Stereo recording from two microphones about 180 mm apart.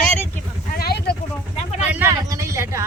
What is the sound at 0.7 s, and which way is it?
Vehicle, 60° left (ahead or behind).